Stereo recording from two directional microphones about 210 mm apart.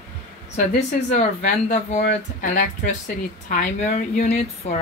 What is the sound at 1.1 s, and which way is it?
Speech, 35° left (ahead or behind).